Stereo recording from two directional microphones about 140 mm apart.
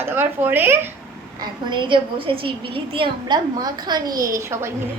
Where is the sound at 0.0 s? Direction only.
15° right (ahead or behind).